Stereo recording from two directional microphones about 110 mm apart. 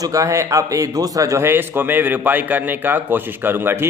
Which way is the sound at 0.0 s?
30° right (ahead or behind).